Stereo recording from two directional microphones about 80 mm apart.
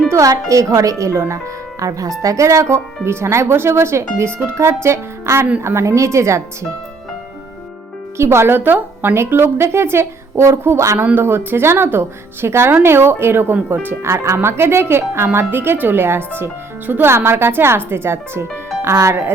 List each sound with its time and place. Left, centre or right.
0.1 s speech: right
8.2 s speech: right